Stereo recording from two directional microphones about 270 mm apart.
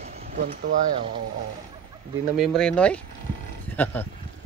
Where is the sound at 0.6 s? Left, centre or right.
Right.